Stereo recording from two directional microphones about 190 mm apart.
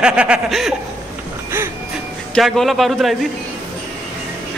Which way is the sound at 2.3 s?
Centre (ahead or behind).